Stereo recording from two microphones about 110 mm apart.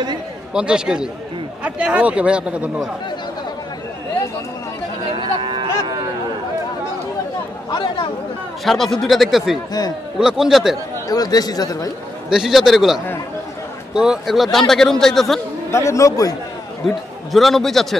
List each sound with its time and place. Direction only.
0.5 s speech: 5° right (ahead or behind)
5.4 s a sound: 45° right (ahead or behind)
7.7 s speech: 45° left (ahead or behind)
8.6 s a man's voice: centre (ahead or behind)
11.1 s speech: 35° left (ahead or behind)
12.3 s a man's voice: 5° right (ahead or behind)
15.7 s speech: 25° left (ahead or behind)
16.8 s a man's voice: centre (ahead or behind)